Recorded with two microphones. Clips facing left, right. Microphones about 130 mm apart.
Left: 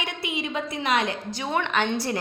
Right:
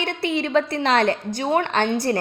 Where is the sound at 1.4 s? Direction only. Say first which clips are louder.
Right 3 dB; 45° right (ahead or behind).